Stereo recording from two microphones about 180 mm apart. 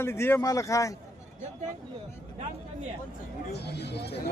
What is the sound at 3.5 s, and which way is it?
Speech, 65° left (ahead or behind).